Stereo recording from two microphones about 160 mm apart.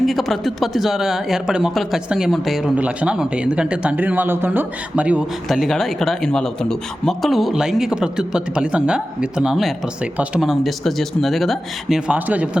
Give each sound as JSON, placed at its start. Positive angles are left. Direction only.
{"t": 0.0, "sound": "speech", "side_deg": 0}